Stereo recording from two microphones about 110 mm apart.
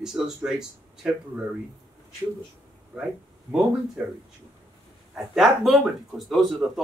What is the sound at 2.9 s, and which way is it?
Speech, 5° right (ahead or behind).